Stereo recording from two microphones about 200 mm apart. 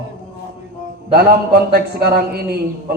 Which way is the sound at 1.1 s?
50° right (ahead or behind).